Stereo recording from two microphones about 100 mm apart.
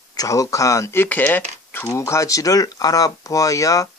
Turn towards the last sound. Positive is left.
turn(degrees=35)  # may be behind; listen again after turning